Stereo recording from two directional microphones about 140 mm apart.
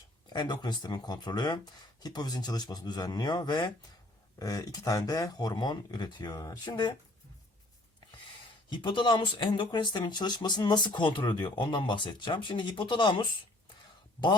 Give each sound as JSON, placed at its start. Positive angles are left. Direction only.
{"t": 0.3, "sound": "speech", "side_deg": 30}
{"t": 8.7, "sound": "speech", "side_deg": 35}